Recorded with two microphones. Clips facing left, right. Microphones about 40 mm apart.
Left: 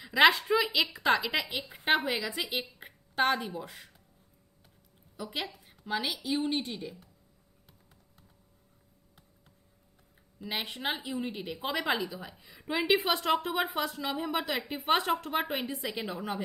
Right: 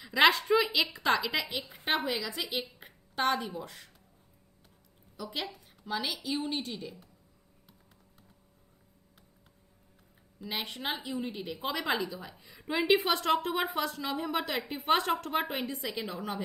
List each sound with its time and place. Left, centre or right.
0.0 s a woman's voice: centre
5.1 s a woman's voice: centre
7.7 s computer keyboard: centre
10.4 s a woman's voice: centre